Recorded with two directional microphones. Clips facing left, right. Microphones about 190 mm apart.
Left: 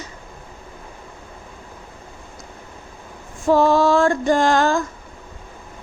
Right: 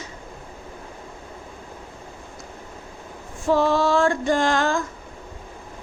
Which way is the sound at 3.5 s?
45° left (ahead or behind).